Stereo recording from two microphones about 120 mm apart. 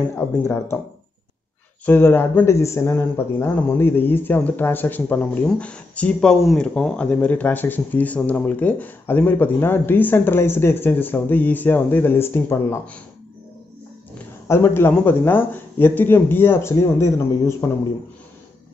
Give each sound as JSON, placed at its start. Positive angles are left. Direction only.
{"t": 0.4, "sound": "speech", "side_deg": 20}
{"t": 1.9, "sound": "speech", "side_deg": 20}
{"t": 14.1, "sound": "speech", "side_deg": 20}